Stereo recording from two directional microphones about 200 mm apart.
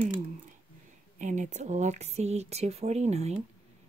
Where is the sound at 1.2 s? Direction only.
35° right (ahead or behind).